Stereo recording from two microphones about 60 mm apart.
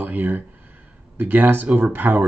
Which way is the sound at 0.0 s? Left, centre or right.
Right.